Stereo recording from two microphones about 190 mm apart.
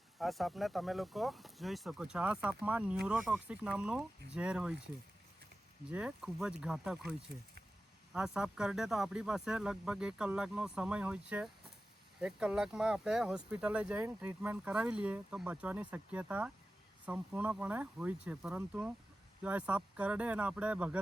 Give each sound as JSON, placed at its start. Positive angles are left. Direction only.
{"t": 0.2, "sound": "speech", "side_deg": 0}
{"t": 5.9, "sound": "speech", "side_deg": -5}